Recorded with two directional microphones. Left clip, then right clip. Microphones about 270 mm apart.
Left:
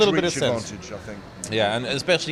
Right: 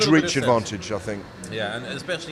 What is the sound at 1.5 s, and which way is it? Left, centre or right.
Speech, left.